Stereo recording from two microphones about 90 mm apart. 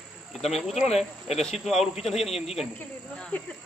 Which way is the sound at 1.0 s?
Centre (ahead or behind).